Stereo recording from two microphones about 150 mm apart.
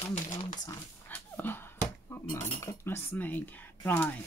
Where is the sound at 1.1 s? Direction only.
15° left (ahead or behind).